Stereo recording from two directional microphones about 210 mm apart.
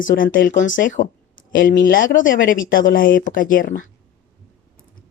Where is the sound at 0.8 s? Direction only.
40° left (ahead or behind).